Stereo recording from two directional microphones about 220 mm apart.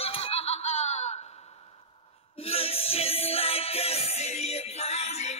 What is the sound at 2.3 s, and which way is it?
Music, 25° left (ahead or behind).